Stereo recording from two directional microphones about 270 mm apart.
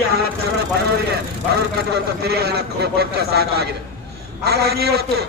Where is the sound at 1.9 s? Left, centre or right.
Right.